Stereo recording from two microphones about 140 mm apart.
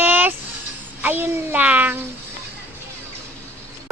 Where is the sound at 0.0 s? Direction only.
15° right (ahead or behind).